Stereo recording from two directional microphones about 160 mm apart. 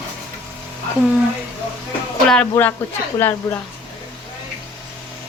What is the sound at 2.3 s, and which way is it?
A woman's voice, 10° left (ahead or behind).